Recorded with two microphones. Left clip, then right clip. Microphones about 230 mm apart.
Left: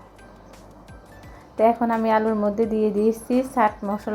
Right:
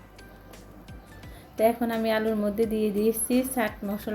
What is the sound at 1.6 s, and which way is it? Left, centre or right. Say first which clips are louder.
A woman's voice: left 5 dB; centre.